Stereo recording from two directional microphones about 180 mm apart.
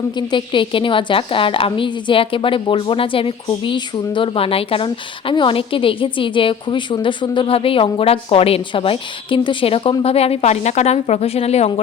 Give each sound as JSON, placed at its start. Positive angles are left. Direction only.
{"t": 0.2, "sound": "a woman's voice", "side_deg": 25}